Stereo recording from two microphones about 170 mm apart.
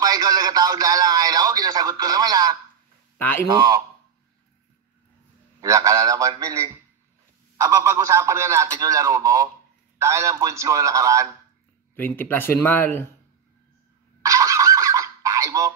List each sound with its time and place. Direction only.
0.0 s radio: 20° right (ahead or behind)
3.2 s speech: 10° left (ahead or behind)
3.4 s a man's voice: 20° right (ahead or behind)
5.6 s a man's voice: 20° right (ahead or behind)
11.9 s speech: 10° left (ahead or behind)
14.2 s a sound: 20° right (ahead or behind)